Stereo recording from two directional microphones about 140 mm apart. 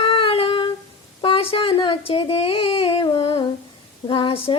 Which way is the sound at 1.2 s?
40° left (ahead or behind).